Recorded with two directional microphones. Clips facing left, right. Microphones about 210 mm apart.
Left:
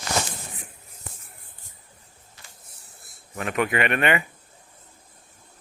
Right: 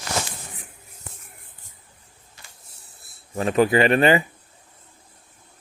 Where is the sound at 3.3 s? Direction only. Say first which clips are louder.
Right 7 dB; 30° right (ahead or behind).